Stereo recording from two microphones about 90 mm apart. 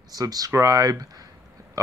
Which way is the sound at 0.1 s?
45° right (ahead or behind).